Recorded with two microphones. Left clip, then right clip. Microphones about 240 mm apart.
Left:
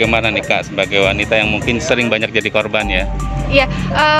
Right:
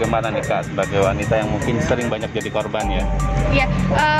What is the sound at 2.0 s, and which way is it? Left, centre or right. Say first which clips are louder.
Speech: left 8 dB; left.